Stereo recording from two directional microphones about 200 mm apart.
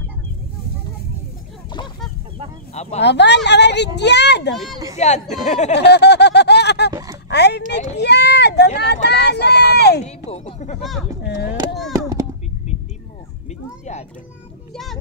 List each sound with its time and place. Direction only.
2.7 s speech: 35° left (ahead or behind)
3.0 s speech: 60° left (ahead or behind)
4.9 s speech: 35° left (ahead or behind)
5.8 s a sound: 55° left (ahead or behind)
6.9 s a sound: 15° right (ahead or behind)
7.2 s oink: 55° left (ahead or behind)
8.0 s a sound: 55° left (ahead or behind)
10.0 s speech: 35° left (ahead or behind)
11.2 s speech: 55° left (ahead or behind)
11.9 s a sound: 15° right (ahead or behind)
13.5 s children playing: 35° left (ahead or behind)
14.7 s a child's voice: centre (ahead or behind)